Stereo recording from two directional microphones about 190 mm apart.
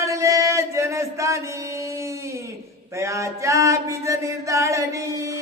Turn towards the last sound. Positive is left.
turn(degrees=-15)  # may be behind; listen again after turning